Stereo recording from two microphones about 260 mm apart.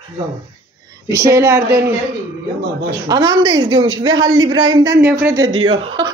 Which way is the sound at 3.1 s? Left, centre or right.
Centre.